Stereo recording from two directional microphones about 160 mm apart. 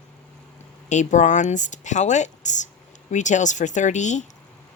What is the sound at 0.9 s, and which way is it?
Speech, 50° left (ahead or behind).